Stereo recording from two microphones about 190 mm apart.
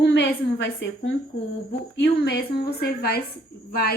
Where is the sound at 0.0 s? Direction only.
65° left (ahead or behind).